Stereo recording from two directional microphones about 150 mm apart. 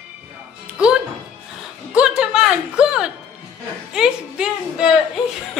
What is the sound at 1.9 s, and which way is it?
A woman's voice, 5° right (ahead or behind).